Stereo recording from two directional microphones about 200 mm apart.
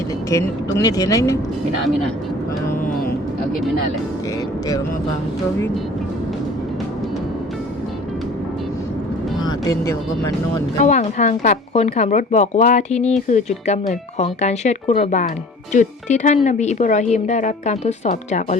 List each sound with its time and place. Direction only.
0.3 s speech: 15° left (ahead or behind)
9.4 s speech: 20° left (ahead or behind)
10.8 s a woman's voice: 35° left (ahead or behind)